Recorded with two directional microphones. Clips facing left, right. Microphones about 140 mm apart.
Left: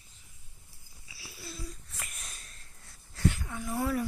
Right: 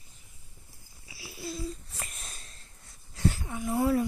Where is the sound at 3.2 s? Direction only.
35° right (ahead or behind).